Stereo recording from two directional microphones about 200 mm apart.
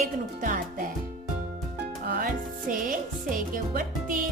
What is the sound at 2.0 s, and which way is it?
Music, 50° right (ahead or behind).